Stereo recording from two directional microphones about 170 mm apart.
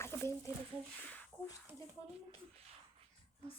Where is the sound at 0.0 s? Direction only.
15° left (ahead or behind).